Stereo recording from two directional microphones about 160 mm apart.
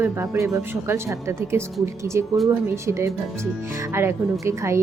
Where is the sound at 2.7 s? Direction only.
15° right (ahead or behind).